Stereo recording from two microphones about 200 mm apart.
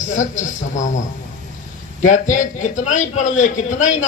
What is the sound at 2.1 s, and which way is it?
A man's voice, 40° left (ahead or behind).